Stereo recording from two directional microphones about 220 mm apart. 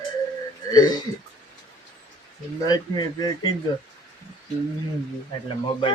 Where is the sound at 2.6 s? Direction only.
20° left (ahead or behind).